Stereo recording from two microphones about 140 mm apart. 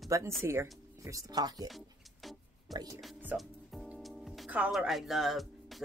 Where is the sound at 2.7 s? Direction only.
25° right (ahead or behind).